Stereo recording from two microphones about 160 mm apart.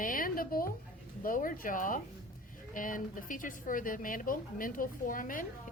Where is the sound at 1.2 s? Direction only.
60° left (ahead or behind).